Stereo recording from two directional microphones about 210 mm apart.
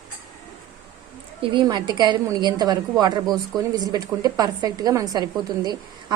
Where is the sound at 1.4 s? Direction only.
20° right (ahead or behind).